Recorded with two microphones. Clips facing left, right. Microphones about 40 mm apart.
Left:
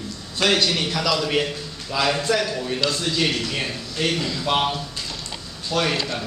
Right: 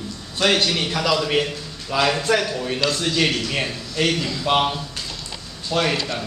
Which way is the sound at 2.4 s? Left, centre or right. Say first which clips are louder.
Right 1 dB; centre.